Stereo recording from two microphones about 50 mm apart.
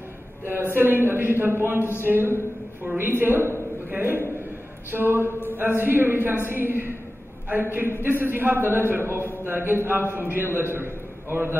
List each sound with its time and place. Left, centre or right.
0.5 s a man's voice: right
1.8 s a sound: left
2.0 s a man's voice: right